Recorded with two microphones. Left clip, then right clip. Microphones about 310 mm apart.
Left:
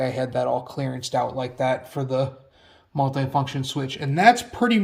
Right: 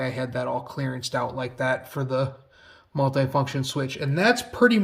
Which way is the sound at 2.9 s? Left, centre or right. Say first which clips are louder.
Even; centre.